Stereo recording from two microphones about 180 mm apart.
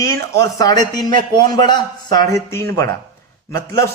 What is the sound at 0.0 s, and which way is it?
A man's voice, 15° left (ahead or behind).